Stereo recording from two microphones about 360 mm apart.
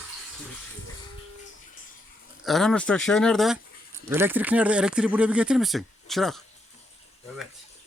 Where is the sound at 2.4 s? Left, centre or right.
Centre.